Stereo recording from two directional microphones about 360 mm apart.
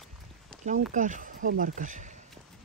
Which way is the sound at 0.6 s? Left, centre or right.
Right.